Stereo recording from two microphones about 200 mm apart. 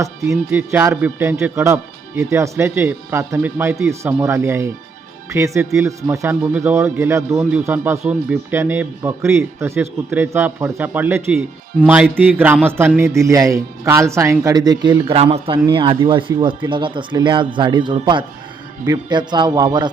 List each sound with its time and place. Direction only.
0.0 s a man's voice: 15° right (ahead or behind)